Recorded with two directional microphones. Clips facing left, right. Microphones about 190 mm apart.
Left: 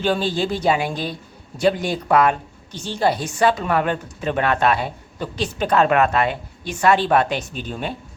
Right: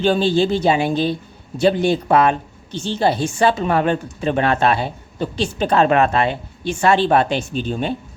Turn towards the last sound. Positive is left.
turn(degrees=-25)  # may be behind; listen again after turning